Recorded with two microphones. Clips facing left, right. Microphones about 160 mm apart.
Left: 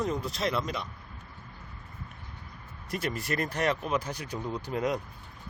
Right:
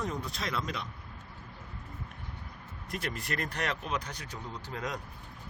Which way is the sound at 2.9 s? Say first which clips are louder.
Left 4 dB; 5° left (ahead or behind).